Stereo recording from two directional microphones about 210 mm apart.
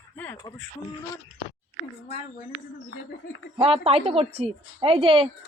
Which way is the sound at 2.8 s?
70° left (ahead or behind).